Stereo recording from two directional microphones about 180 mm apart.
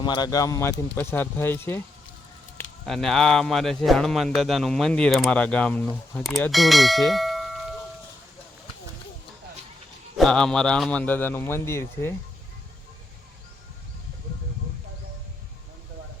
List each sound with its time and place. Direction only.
0.0 s a man's voice: 25° left (ahead or behind)
2.8 s speech: centre (ahead or behind)
10.2 s a man's voice: 5° left (ahead or behind)